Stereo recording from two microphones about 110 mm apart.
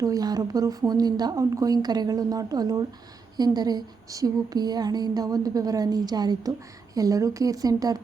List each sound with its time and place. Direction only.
0.0 s speech: 35° right (ahead or behind)